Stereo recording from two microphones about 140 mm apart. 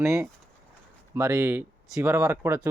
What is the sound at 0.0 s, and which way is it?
Speech, 20° right (ahead or behind).